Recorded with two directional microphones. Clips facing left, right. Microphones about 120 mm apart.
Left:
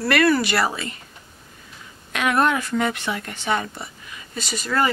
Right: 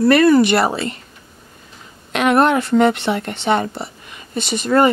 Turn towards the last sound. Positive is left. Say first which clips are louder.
# right 8 dB
turn(degrees=-25)  # may be behind; listen again after turning